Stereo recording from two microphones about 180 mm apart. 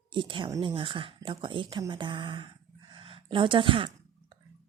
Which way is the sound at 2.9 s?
30° right (ahead or behind).